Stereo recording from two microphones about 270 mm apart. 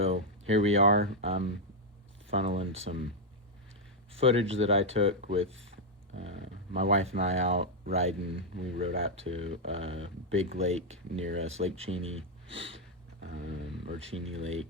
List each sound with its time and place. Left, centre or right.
0.0 s speech: right
4.1 s speech: right
12.5 s a sound: right
14.3 s speech: right